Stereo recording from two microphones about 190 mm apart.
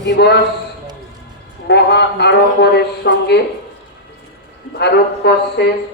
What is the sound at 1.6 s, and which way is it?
A man's voice, 60° left (ahead or behind).